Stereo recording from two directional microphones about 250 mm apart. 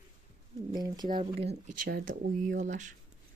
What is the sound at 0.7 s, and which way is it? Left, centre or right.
Speech, centre.